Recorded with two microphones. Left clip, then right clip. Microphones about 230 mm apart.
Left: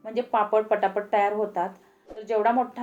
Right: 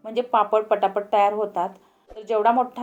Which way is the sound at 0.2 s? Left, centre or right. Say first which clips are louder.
Right 3 dB; right.